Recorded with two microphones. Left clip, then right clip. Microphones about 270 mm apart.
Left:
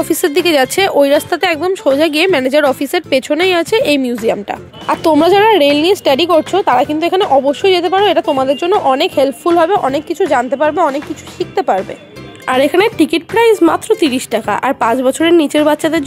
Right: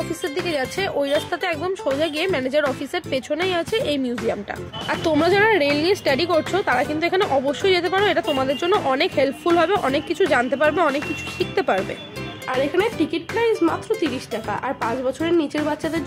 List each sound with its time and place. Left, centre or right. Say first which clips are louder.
0.1 s a woman's voice: left 13 dB; left; by 11.8 s centre
12.4 s a woman's voice: left 10 dB; left